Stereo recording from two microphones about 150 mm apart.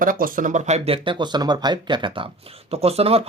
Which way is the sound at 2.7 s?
40° right (ahead or behind).